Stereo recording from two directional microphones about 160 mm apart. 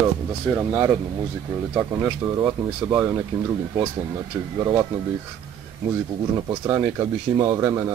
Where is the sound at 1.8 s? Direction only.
15° right (ahead or behind).